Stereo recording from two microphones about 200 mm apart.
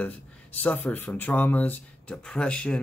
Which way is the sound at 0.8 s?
10° left (ahead or behind).